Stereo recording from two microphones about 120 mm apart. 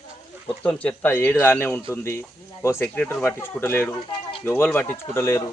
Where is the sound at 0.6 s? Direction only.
10° left (ahead or behind).